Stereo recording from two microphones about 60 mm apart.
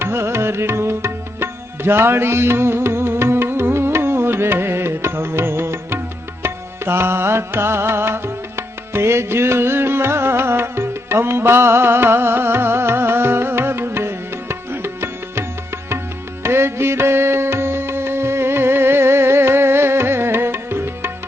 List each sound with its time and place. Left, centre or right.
0.0 s music: right